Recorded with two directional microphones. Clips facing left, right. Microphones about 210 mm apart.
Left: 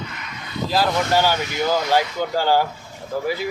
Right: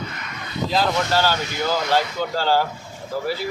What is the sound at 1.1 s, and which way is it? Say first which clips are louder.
Speech: left 2 dB; 15° left (ahead or behind).